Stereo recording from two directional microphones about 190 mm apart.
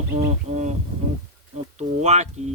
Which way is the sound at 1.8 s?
35° right (ahead or behind).